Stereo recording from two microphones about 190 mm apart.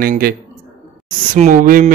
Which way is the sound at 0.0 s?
50° right (ahead or behind).